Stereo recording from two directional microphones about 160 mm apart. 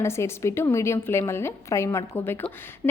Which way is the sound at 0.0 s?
15° left (ahead or behind).